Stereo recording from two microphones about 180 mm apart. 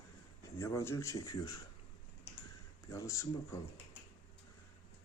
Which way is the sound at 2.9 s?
15° left (ahead or behind).